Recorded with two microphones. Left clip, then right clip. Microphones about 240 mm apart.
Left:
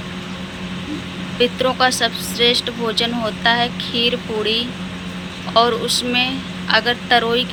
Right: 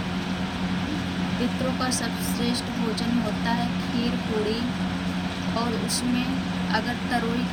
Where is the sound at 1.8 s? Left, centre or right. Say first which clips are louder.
Left 11 dB; centre.